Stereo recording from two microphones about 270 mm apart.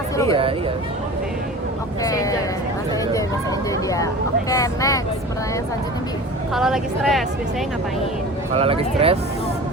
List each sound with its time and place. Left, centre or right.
2.0 s speech: centre
3.8 s speech: centre
6.5 s speech: centre
8.5 s speech: right